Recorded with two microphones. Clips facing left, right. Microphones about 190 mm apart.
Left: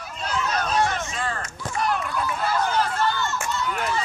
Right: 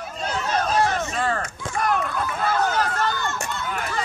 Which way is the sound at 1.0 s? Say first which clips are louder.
Right 5 dB; 55° right (ahead or behind).